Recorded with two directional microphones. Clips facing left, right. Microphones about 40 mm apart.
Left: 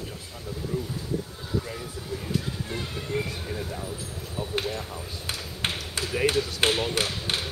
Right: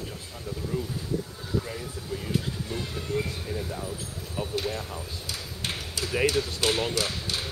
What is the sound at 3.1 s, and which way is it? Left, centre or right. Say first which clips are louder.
Speech: even; left.